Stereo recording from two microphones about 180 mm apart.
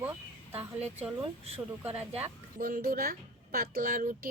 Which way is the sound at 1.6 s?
10° right (ahead or behind).